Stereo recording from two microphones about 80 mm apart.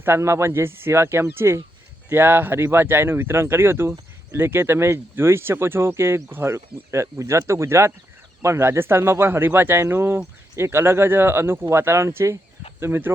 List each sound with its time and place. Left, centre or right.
0.0 s speech: right